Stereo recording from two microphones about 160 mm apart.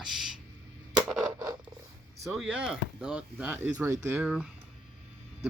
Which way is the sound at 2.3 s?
5° right (ahead or behind).